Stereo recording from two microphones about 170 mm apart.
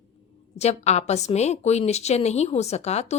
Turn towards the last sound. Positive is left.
turn(degrees=40)  # may be behind; listen again after turning